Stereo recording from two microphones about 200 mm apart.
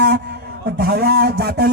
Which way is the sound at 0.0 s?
55° right (ahead or behind).